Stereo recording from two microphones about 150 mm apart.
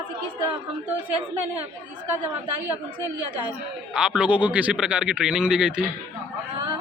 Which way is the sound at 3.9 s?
5° right (ahead or behind).